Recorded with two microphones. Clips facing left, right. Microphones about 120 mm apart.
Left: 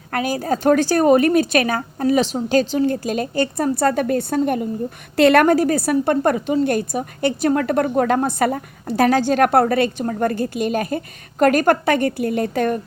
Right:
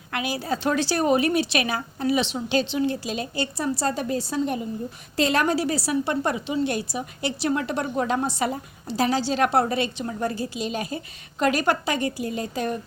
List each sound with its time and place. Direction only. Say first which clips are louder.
0.1 s a woman's voice: left 6 dB; 45° left (ahead or behind)